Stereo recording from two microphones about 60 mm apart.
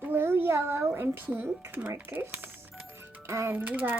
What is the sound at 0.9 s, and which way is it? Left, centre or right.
Speech, right.